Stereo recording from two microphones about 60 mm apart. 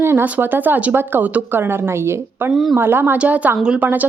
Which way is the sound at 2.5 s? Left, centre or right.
Centre.